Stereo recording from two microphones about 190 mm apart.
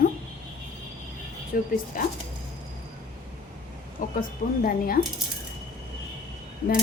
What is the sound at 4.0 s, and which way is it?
Speech, 45° left (ahead or behind).